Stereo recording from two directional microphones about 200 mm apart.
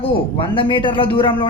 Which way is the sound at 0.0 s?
25° left (ahead or behind).